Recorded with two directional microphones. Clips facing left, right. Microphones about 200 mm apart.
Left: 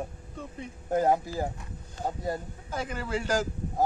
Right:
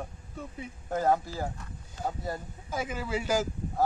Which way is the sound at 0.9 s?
15° left (ahead or behind).